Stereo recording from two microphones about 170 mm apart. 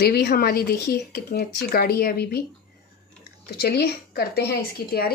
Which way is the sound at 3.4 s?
70° left (ahead or behind).